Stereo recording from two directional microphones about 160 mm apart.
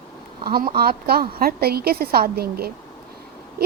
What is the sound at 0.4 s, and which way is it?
A woman's voice, 70° right (ahead or behind).